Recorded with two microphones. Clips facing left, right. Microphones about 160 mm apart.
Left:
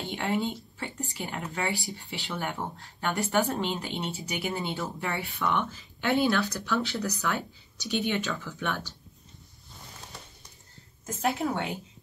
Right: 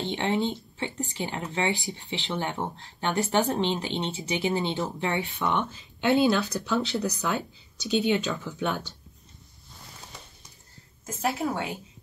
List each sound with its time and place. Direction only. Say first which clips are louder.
0.0 s speech: right 3 dB; 25° right (ahead or behind)
11.1 s a woman's voice: even; centre (ahead or behind)